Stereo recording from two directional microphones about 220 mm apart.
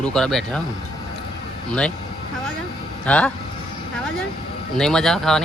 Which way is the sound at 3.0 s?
5° left (ahead or behind).